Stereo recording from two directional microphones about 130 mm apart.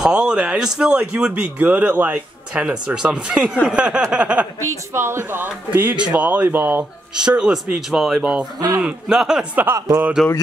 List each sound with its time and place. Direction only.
0.0 s speech: 5° right (ahead or behind)
8.5 s speech: 30° right (ahead or behind)
8.8 s speech: 5° right (ahead or behind)
9.8 s speech: 25° right (ahead or behind)